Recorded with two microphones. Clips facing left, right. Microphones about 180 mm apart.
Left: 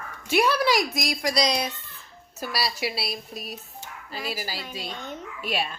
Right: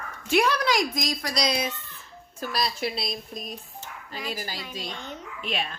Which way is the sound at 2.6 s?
10° left (ahead or behind).